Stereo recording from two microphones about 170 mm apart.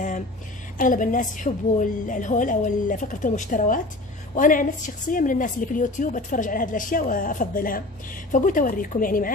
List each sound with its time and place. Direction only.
0.7 s a woman's voice: 50° left (ahead or behind)